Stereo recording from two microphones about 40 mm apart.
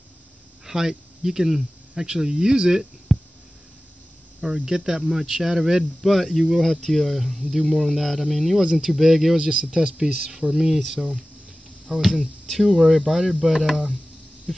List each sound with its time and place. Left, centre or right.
0.7 s speech: centre
3.1 s a sound: centre
4.6 s speech: centre
5.9 s speech: centre
9.4 s speech: right
10.5 s speech: centre